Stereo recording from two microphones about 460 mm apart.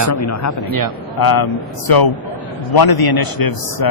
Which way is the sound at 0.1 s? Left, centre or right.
Left.